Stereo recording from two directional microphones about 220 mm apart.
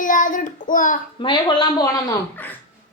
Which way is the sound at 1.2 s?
20° left (ahead or behind).